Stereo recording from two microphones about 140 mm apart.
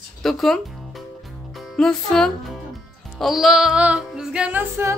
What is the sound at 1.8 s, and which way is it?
Music, 5° left (ahead or behind).